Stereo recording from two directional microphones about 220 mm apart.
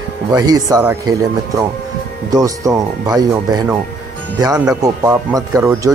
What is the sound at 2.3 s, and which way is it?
Speech, 15° right (ahead or behind).